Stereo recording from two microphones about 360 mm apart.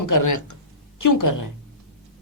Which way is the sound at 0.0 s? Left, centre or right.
Left.